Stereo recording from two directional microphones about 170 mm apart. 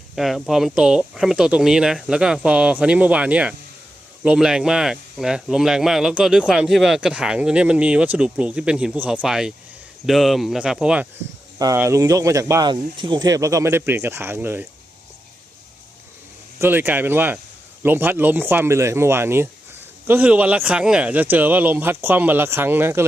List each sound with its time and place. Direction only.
0.2 s speech: centre (ahead or behind)
11.6 s speech: 15° right (ahead or behind)
16.6 s speech: 15° right (ahead or behind)